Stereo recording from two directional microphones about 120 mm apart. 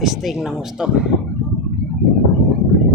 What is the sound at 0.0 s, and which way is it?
Speech, centre (ahead or behind).